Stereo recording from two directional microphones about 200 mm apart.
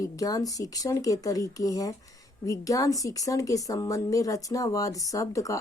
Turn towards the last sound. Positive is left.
turn(degrees=15)  # may be behind; listen again after turning